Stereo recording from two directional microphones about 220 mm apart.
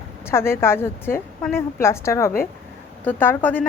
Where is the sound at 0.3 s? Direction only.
10° left (ahead or behind).